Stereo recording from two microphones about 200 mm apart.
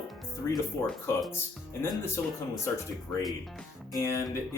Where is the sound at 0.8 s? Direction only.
5° left (ahead or behind).